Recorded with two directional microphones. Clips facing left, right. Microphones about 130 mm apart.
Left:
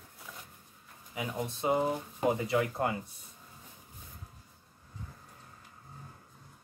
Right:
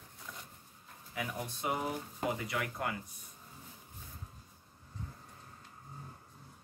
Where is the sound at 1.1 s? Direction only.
20° left (ahead or behind).